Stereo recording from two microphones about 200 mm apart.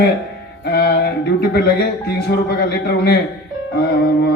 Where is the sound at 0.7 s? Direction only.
55° left (ahead or behind).